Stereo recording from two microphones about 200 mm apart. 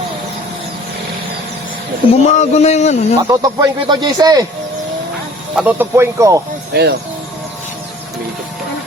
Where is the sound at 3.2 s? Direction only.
20° right (ahead or behind).